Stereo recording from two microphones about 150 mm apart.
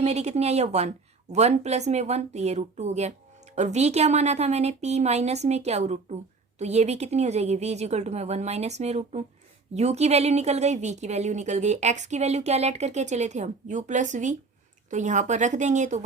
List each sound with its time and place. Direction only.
0.0 s a woman's voice: 45° right (ahead or behind)